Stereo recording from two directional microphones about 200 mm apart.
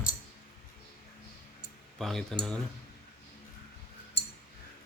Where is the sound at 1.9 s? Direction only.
Centre (ahead or behind).